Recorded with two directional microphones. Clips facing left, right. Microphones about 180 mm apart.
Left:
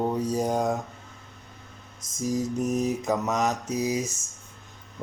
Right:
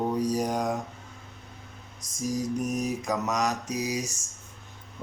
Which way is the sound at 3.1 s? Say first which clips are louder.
Even; 25° left (ahead or behind).